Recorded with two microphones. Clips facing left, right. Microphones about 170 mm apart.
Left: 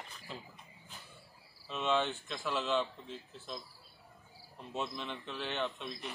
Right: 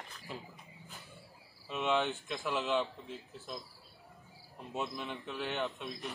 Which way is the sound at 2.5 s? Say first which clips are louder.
Even; 15° right (ahead or behind).